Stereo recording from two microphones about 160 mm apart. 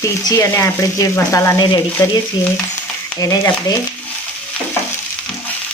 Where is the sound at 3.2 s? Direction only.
25° left (ahead or behind).